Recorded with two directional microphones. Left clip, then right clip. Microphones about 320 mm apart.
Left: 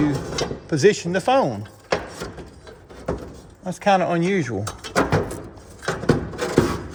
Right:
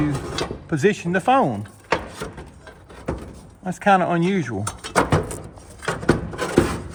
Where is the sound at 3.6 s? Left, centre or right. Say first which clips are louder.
Right 1 dB; centre.